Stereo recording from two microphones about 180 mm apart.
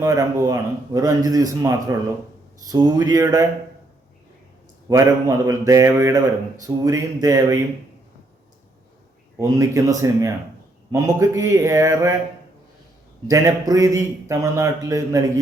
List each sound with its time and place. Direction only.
0.0 s speech: 20° right (ahead or behind)
4.9 s speech: 20° right (ahead or behind)
9.4 s a man's voice: 15° right (ahead or behind)
13.2 s a man's voice: 20° right (ahead or behind)